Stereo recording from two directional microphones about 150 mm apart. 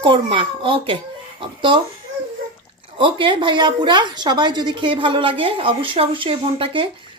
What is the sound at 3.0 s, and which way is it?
A woman's voice, 35° right (ahead or behind).